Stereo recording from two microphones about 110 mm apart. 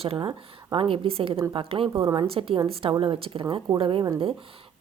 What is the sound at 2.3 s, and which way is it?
A woman's voice, 55° right (ahead or behind).